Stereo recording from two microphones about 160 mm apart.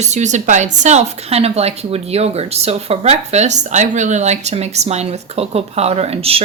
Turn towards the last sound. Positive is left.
turn(degrees=-40)  # may be behind; listen again after turning